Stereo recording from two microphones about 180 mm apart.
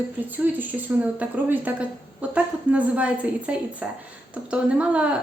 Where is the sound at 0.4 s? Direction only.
10° right (ahead or behind).